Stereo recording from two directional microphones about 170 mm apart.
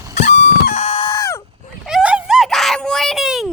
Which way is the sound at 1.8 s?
5° right (ahead or behind).